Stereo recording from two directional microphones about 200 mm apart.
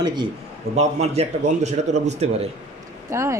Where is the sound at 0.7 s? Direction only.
35° right (ahead or behind).